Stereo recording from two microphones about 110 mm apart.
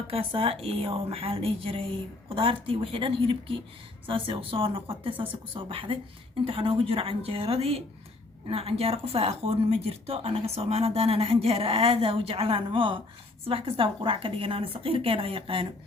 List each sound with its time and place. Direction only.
0.1 s speech: 60° right (ahead or behind)